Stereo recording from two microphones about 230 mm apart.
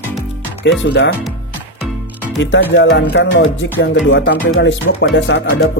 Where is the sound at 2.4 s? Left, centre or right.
Left.